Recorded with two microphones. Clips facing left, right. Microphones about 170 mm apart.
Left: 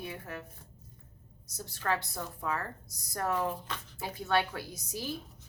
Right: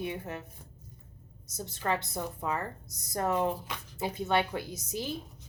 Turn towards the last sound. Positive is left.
turn(degrees=-20)  # may be behind; listen again after turning